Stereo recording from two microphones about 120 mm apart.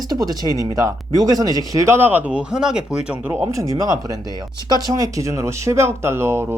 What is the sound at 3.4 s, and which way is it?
Speech, 30° right (ahead or behind).